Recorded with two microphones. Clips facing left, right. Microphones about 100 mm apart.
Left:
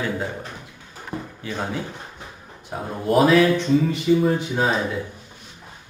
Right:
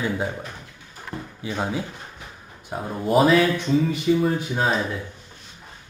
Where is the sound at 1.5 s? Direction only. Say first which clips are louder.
Right 2 dB; 15° right (ahead or behind).